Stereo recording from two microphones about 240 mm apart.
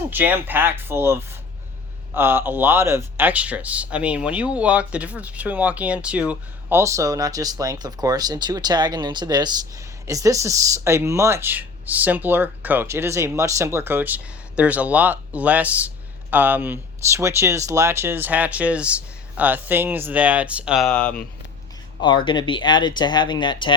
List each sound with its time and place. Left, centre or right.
0.1 s speech: centre
22.0 s speech: centre